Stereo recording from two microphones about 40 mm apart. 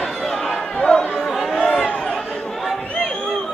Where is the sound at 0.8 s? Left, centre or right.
Left.